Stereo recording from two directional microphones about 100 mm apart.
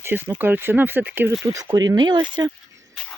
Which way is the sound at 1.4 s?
40° right (ahead or behind).